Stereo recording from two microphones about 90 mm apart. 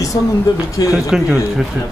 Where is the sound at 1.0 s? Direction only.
5° right (ahead or behind).